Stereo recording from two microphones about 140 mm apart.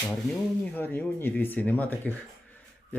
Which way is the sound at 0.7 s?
15° left (ahead or behind).